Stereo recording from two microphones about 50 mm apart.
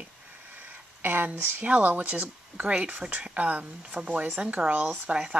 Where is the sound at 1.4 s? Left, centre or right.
Right.